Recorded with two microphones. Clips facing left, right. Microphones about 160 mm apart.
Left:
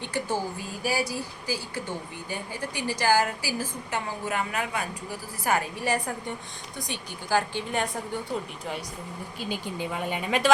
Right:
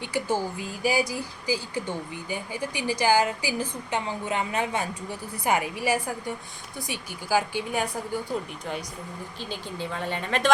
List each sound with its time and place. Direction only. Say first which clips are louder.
0.0 s a woman's voice: right 2 dB; 10° right (ahead or behind); by 5.5 s 25° right (ahead or behind)
5.5 s speech: right 1 dB; 10° right (ahead or behind)
9.4 s speech: left 3 dB; 15° left (ahead or behind)